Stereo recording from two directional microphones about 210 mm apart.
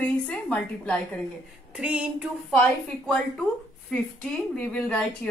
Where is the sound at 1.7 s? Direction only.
5° right (ahead or behind).